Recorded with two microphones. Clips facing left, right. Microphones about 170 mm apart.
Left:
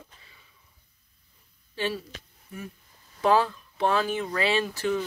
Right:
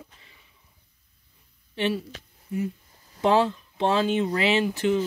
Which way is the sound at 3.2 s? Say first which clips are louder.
Right 1 dB; 25° right (ahead or behind).